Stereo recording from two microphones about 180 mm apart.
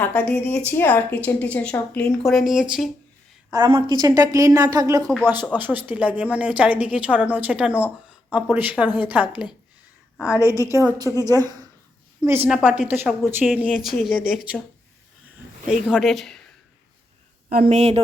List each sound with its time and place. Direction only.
0.0 s a woman's voice: 5° left (ahead or behind)
3.8 s speech: 20° right (ahead or behind)
5.0 s a woman's voice: centre (ahead or behind)
5.5 s a woman's voice: 10° right (ahead or behind)
10.2 s a woman's voice: 20° left (ahead or behind)
10.6 s a woman's voice: 15° right (ahead or behind)
15.9 s a woman's voice: centre (ahead or behind)
17.7 s speech: 35° right (ahead or behind)